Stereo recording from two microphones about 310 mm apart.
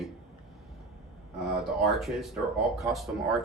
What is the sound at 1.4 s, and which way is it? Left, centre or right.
Speech, centre.